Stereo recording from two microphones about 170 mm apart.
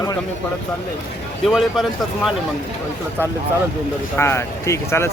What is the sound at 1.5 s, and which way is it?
Speech, centre (ahead or behind).